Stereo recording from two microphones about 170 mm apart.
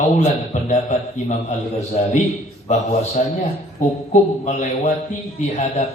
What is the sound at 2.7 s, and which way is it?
A man's voice, 45° left (ahead or behind).